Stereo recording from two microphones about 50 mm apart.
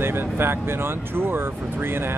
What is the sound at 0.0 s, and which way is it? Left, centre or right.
Speech, right.